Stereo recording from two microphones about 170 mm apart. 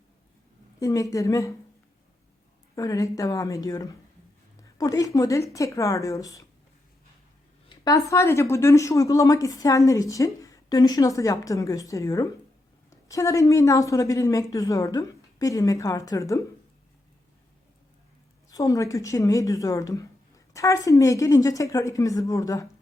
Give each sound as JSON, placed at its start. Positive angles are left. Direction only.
{"t": 0.8, "sound": "a woman's voice", "side_deg": 20}
{"t": 2.7, "sound": "a woman's voice", "side_deg": 20}
{"t": 7.9, "sound": "a woman's voice", "side_deg": 20}
{"t": 18.5, "sound": "a woman's voice", "side_deg": 20}